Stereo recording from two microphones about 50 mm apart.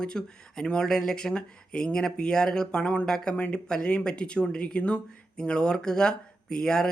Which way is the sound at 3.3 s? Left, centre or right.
Left.